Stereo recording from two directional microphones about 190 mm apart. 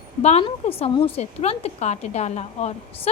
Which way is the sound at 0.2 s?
35° left (ahead or behind).